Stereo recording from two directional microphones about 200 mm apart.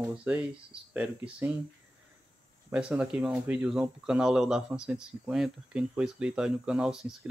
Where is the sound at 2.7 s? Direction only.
5° right (ahead or behind).